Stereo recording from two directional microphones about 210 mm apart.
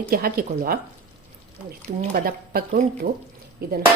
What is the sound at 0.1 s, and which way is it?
Speech, 45° right (ahead or behind).